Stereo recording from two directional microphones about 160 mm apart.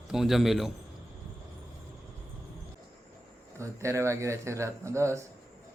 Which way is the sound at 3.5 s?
20° right (ahead or behind).